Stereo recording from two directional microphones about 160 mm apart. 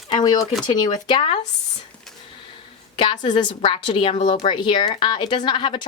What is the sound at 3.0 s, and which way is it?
Speech, 30° left (ahead or behind).